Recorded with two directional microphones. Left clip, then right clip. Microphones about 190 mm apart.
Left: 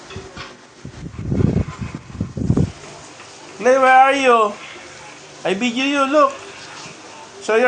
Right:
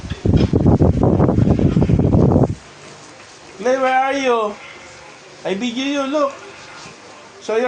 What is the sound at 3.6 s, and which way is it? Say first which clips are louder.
Speech: left 5 dB; 35° left (ahead or behind).